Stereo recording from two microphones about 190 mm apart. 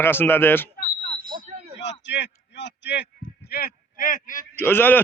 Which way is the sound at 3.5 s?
50° left (ahead or behind).